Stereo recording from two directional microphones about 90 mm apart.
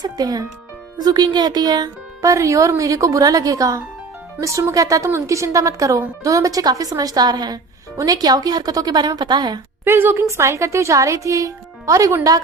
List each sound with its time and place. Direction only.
0.0 s a child's voice: 45° right (ahead or behind)
9.8 s speech: 25° right (ahead or behind)